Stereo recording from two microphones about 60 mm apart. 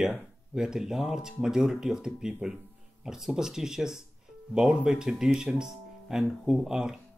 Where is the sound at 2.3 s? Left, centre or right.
Right.